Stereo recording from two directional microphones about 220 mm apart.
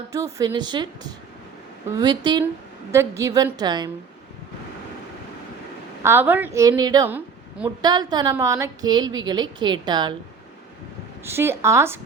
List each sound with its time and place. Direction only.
0.3 s a woman's voice: 20° right (ahead or behind)
6.0 s a woman's voice: 10° right (ahead or behind)
11.3 s a woman's voice: 10° right (ahead or behind)